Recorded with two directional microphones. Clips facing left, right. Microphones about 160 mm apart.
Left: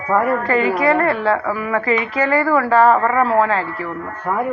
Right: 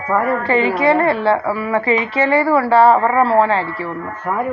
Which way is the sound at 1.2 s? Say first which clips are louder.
Right 2 dB; 30° right (ahead or behind).